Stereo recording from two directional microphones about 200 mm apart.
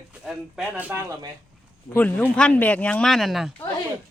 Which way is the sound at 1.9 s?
10° left (ahead or behind).